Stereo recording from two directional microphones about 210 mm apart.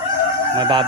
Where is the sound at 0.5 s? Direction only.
20° right (ahead or behind).